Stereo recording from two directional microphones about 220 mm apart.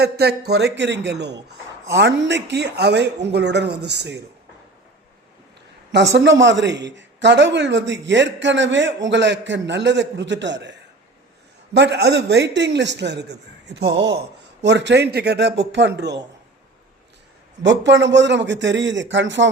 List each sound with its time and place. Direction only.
0.0 s a man's voice: 45° right (ahead or behind)
6.1 s a man's voice: 55° right (ahead or behind)
17.6 s a man's voice: 55° right (ahead or behind)